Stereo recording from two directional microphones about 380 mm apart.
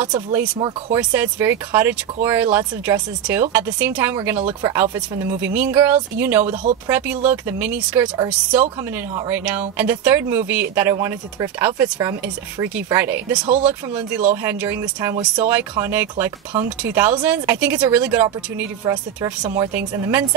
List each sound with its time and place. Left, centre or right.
0.0 s speech: centre
6.5 s speech: right
6.9 s speech: centre